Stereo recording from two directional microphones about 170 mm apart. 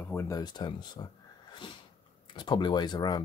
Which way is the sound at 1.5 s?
25° left (ahead or behind).